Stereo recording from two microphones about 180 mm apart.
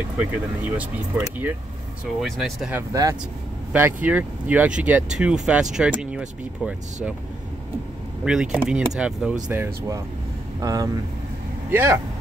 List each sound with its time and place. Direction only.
0.2 s speech: 10° right (ahead or behind)
2.2 s speech: centre (ahead or behind)
2.7 s speech: 20° right (ahead or behind)
8.3 s speech: 5° right (ahead or behind)